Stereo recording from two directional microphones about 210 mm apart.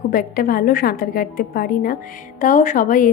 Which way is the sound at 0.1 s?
45° left (ahead or behind).